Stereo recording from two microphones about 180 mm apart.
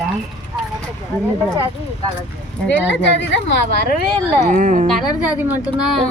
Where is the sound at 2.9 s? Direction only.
90° left.